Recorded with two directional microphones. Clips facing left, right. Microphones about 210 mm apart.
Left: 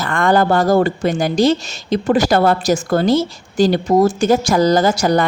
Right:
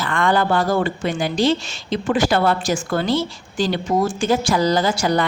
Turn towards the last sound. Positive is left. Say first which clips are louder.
# left 4 dB
turn(degrees=45)  # may be behind; listen again after turning